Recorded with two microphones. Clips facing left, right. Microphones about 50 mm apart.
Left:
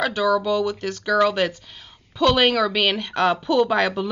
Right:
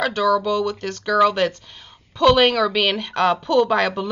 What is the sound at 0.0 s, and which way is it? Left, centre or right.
Speech, centre.